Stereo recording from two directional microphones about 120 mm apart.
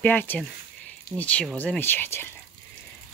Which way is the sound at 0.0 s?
15° left (ahead or behind).